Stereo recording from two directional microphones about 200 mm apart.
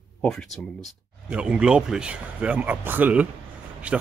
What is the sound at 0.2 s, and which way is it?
Speech, 5° left (ahead or behind).